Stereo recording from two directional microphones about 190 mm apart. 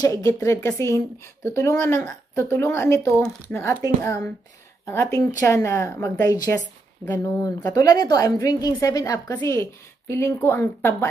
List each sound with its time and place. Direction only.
0.0 s speech: 20° left (ahead or behind)